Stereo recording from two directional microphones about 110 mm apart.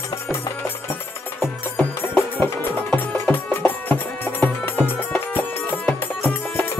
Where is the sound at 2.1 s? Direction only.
20° left (ahead or behind).